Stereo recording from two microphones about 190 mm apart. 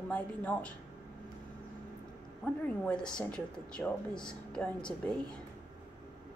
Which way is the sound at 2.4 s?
5° left (ahead or behind).